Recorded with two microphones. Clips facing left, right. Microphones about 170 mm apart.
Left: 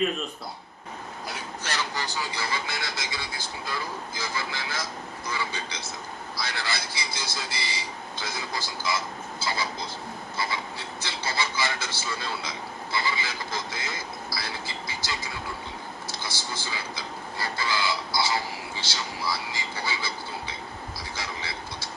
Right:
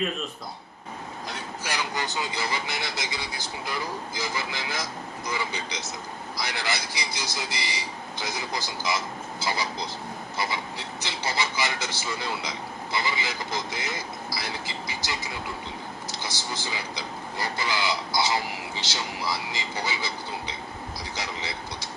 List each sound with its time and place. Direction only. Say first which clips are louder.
1.6 s speech: right 1 dB; 15° right (ahead or behind)